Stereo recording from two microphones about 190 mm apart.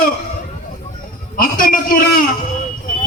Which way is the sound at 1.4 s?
45° left (ahead or behind).